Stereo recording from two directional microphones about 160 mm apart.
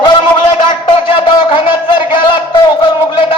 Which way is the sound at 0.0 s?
30° left (ahead or behind).